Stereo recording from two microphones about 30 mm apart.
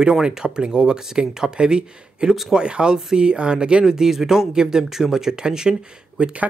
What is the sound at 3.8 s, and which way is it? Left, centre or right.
Speech, centre.